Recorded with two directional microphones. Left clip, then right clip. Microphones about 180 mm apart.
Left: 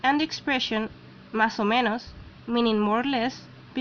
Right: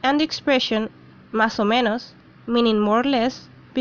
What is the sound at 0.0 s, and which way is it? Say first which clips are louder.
Speech: right 4 dB; 25° right (ahead or behind).